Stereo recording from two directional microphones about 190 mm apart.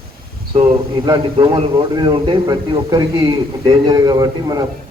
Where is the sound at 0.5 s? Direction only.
20° right (ahead or behind).